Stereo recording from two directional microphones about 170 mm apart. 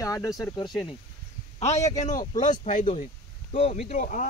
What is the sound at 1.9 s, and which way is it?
Speech, 45° left (ahead or behind).